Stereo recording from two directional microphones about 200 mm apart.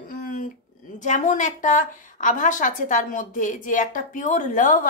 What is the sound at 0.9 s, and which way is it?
A woman's voice, 40° left (ahead or behind).